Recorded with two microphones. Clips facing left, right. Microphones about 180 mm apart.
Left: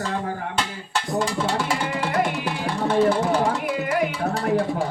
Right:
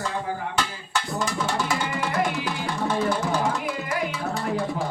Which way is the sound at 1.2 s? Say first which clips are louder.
Left 3 dB; 30° left (ahead or behind).